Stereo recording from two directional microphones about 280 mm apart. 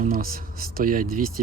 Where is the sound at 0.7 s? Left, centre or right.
Right.